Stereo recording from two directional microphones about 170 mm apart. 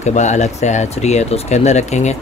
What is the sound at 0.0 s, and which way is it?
Speech, 45° left (ahead or behind).